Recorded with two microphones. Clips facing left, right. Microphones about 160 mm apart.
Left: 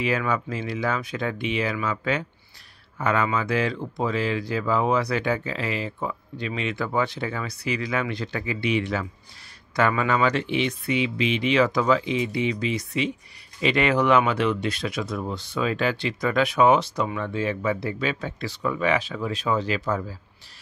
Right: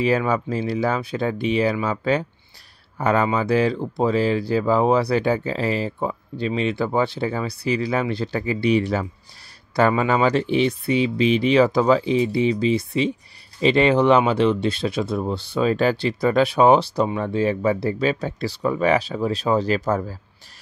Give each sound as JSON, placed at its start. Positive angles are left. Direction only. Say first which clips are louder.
{"t": 0.0, "sound": "speech", "louder": "right 5 dB", "side_deg": -35}